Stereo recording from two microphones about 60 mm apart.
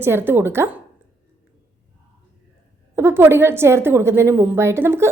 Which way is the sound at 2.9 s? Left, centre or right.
Right.